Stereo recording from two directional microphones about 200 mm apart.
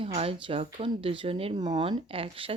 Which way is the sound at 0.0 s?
30° right (ahead or behind).